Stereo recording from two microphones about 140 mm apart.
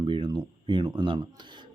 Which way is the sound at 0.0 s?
35° right (ahead or behind).